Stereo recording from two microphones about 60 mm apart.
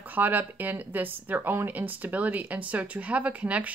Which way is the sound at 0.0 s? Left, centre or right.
Right.